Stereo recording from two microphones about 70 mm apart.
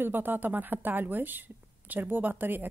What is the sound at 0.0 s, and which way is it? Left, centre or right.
A woman's voice, right.